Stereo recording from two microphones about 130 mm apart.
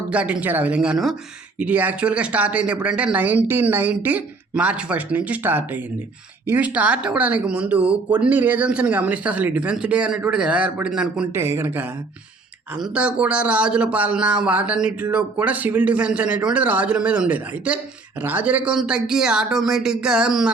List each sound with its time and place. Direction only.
0.1 s speech: 10° right (ahead or behind)
11.3 s speech: 20° right (ahead or behind)